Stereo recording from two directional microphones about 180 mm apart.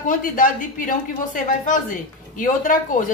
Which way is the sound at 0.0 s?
50° left (ahead or behind).